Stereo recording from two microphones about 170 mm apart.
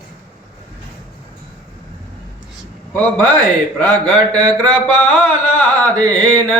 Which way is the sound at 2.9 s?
5° left (ahead or behind).